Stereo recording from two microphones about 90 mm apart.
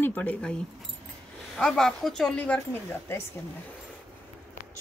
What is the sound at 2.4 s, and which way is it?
Speech, 15° left (ahead or behind).